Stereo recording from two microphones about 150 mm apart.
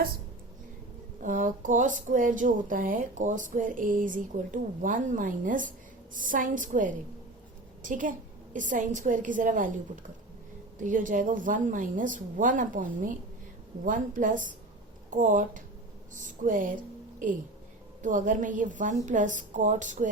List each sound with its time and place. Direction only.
1.2 s a woman's voice: 60° right (ahead or behind)
18.0 s speech: 60° right (ahead or behind)